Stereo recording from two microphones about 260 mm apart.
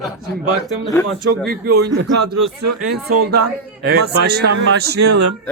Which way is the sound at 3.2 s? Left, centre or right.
Right.